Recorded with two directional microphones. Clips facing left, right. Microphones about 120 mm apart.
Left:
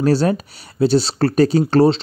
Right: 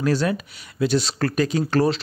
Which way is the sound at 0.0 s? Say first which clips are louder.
Left 5 dB; 35° left (ahead or behind).